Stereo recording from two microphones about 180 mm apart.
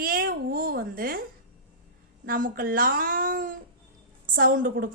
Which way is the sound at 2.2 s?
50° right (ahead or behind).